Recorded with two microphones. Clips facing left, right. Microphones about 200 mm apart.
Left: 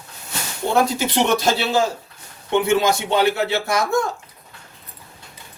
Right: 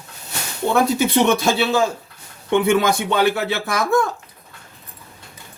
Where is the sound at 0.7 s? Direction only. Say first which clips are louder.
Right 2 dB; 55° right (ahead or behind).